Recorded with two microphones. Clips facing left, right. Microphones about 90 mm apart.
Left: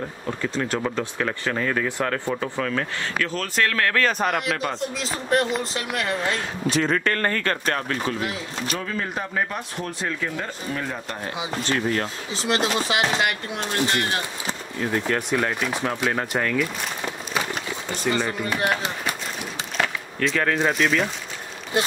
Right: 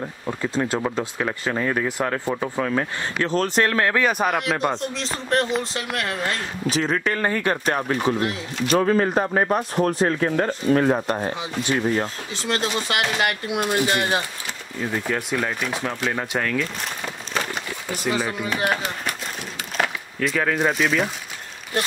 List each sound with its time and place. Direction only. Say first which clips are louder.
0.3 s speech: right 2 dB; 15° right (ahead or behind)
3.2 s a man's voice: right 4 dB; 25° right (ahead or behind)
8.6 s speech: right 12 dB; 40° right (ahead or behind)
11.6 s speech: right 3 dB; 15° right (ahead or behind)
13.2 s speech: right 2 dB; 10° right (ahead or behind)
15.3 s a man's voice: left 1 dB; centre (ahead or behind)
17.8 s a man's voice: even; 10° right (ahead or behind)
19.8 s speech: right 1 dB; 5° right (ahead or behind)